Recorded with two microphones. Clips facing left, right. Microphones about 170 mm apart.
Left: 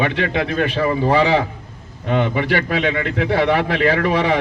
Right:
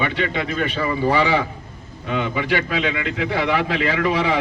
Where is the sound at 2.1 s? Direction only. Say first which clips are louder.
Left 4 dB; 55° left (ahead or behind).